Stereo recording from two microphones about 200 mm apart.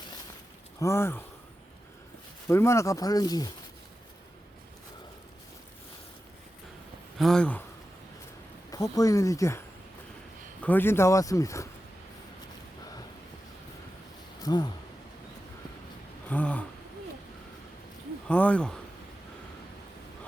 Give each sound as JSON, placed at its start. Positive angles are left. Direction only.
{"t": 0.8, "sound": "speech", "side_deg": 15}
{"t": 2.5, "sound": "speech", "side_deg": 15}
{"t": 7.2, "sound": "speech", "side_deg": 5}
{"t": 8.7, "sound": "speech", "side_deg": 15}
{"t": 10.6, "sound": "speech", "side_deg": 10}
{"t": 14.4, "sound": "speech", "side_deg": 20}
{"t": 16.3, "sound": "speech", "side_deg": 5}
{"t": 18.3, "sound": "speech", "side_deg": 5}